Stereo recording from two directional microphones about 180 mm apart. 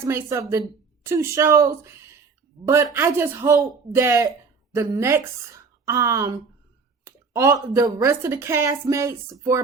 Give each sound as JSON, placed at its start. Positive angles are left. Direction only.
{"t": 0.0, "sound": "a woman's voice", "side_deg": -15}